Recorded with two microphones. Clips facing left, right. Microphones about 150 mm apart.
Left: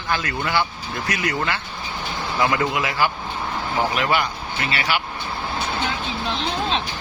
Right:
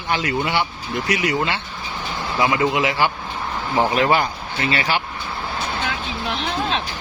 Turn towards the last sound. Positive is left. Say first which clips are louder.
# right 2 dB
turn(degrees=-30)  # may be behind; listen again after turning